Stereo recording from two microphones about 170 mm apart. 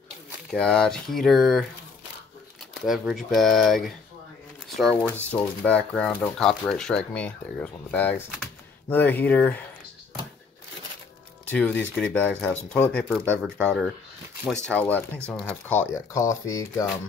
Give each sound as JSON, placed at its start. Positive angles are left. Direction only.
{"t": 0.5, "sound": "speech", "side_deg": 5}
{"t": 2.8, "sound": "speech", "side_deg": 0}
{"t": 11.4, "sound": "speech", "side_deg": 10}
{"t": 13.4, "sound": "speech", "side_deg": 0}